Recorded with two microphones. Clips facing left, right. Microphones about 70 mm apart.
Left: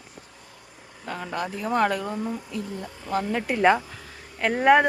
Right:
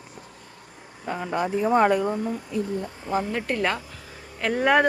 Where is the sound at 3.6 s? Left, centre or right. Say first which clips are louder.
Left 6 dB; centre.